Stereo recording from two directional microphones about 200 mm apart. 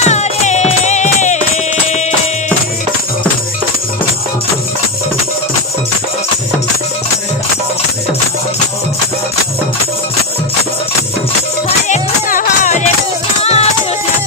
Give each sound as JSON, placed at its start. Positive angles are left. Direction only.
{"t": 0.0, "sound": "music", "side_deg": 35}
{"t": 11.9, "sound": "music", "side_deg": 40}